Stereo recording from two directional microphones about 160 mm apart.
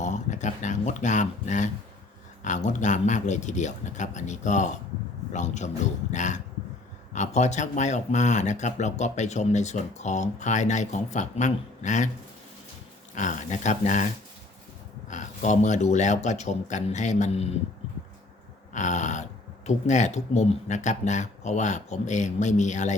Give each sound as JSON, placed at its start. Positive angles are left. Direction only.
{"t": 0.0, "sound": "speech", "side_deg": 50}
{"t": 13.1, "sound": "speech", "side_deg": 50}
{"t": 18.7, "sound": "speech", "side_deg": 50}